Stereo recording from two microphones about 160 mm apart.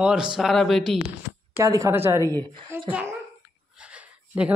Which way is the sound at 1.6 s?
20° right (ahead or behind).